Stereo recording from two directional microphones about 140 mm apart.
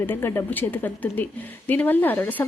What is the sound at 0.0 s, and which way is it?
A woman's voice, 15° left (ahead or behind).